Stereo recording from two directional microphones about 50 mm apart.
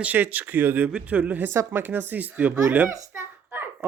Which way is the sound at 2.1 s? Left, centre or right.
Right.